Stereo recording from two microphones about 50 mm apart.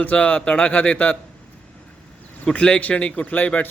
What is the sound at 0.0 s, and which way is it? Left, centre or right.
A man's voice, left.